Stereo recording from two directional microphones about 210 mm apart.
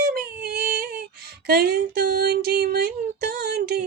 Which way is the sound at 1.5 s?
45° right (ahead or behind).